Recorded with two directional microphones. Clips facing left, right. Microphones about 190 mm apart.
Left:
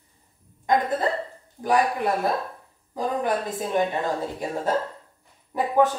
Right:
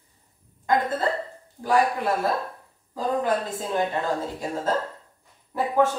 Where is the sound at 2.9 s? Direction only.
20° left (ahead or behind).